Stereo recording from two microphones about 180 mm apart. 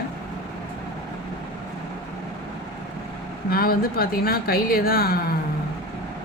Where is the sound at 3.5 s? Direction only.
55° left (ahead or behind).